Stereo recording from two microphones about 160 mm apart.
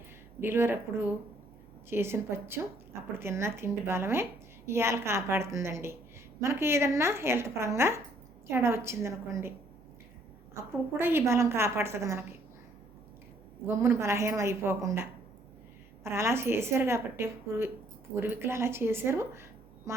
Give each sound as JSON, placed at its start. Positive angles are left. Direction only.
{"t": 0.3, "sound": "a woman's voice", "side_deg": -15}
{"t": 10.5, "sound": "a woman's voice", "side_deg": -15}
{"t": 13.7, "sound": "a woman's voice", "side_deg": -15}
{"t": 16.0, "sound": "a woman's voice", "side_deg": -15}